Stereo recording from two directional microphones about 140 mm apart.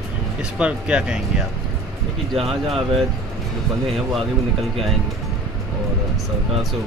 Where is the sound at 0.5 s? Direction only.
10° right (ahead or behind).